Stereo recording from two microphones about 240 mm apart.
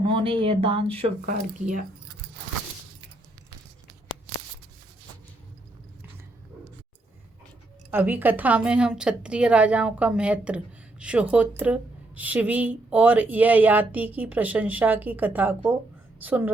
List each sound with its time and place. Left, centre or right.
0.0 s speech: right
1.2 s speech: right
7.9 s a woman's voice: centre